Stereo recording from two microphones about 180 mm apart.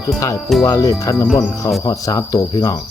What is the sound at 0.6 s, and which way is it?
Speech, 15° left (ahead or behind).